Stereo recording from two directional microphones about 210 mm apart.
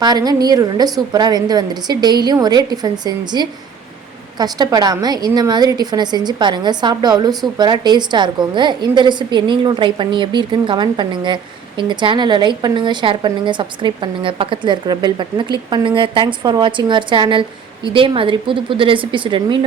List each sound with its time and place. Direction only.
0.0 s a woman's voice: 20° right (ahead or behind)